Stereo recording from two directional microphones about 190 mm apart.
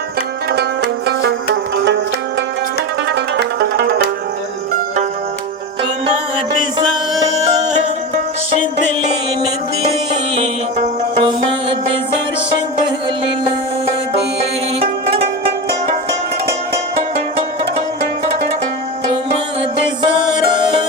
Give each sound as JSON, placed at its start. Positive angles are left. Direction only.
{"t": 0.5, "sound": "music", "side_deg": -60}
{"t": 3.1, "sound": "music", "side_deg": -60}
{"t": 7.2, "sound": "music", "side_deg": -20}
{"t": 10.3, "sound": "music", "side_deg": -35}
{"t": 14.8, "sound": "music", "side_deg": -30}